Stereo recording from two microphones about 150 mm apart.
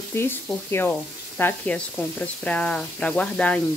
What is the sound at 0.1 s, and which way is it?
Speech, 15° left (ahead or behind).